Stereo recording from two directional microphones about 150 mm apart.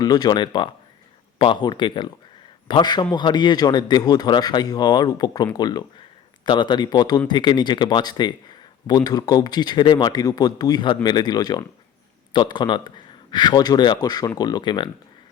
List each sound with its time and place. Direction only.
0.0 s speech: 25° left (ahead or behind)